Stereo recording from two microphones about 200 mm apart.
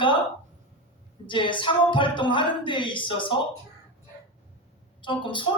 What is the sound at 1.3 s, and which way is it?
A man's voice, 25° left (ahead or behind).